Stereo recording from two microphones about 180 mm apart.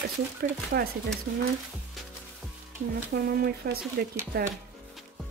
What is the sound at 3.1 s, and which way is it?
Speech, 60° right (ahead or behind).